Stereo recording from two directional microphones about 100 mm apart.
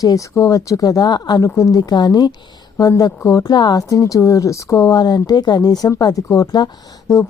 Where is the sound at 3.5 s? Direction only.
45° left (ahead or behind).